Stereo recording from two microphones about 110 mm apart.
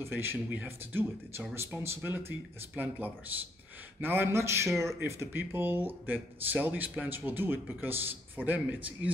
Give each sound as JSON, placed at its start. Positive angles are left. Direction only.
{"t": 0.0, "sound": "speech", "side_deg": -20}